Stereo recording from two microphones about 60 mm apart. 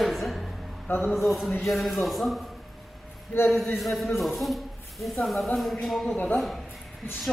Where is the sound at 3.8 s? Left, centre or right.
Centre.